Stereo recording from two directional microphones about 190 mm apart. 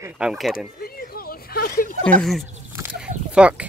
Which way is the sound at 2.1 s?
5° left (ahead or behind).